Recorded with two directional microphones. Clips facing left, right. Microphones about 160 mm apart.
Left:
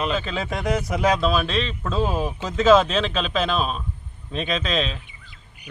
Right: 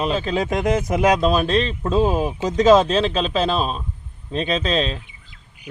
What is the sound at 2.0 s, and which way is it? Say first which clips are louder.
Speech: right 5 dB; 15° right (ahead or behind).